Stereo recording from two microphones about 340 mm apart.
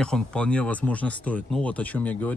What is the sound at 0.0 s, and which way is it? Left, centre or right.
Speech, centre.